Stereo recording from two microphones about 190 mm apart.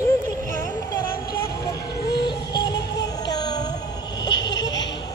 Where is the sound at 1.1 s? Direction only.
55° left (ahead or behind).